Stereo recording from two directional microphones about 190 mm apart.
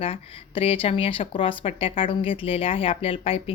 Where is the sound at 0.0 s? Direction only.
30° left (ahead or behind).